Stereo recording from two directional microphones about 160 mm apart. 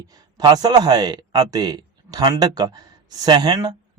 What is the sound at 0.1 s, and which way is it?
Speech, 25° right (ahead or behind).